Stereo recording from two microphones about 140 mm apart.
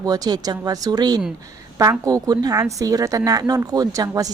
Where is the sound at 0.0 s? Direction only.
25° right (ahead or behind).